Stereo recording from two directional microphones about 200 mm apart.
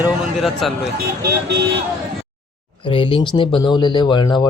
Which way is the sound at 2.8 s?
25° left (ahead or behind).